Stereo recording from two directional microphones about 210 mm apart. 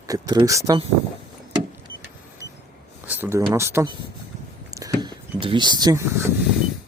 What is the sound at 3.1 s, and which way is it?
Speech, 10° right (ahead or behind).